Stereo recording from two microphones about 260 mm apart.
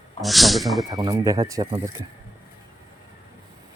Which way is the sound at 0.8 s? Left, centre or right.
Centre.